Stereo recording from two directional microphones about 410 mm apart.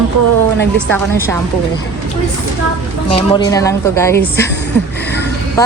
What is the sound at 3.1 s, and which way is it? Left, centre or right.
Speech, centre.